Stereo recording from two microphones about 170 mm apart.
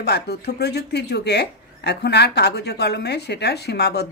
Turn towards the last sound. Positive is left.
turn(degrees=75)  # may be behind; listen again after turning